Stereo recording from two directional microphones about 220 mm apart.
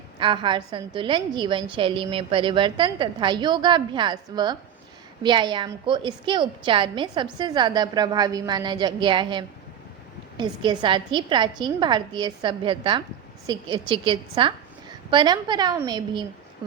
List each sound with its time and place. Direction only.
0.2 s a woman's voice: 20° right (ahead or behind)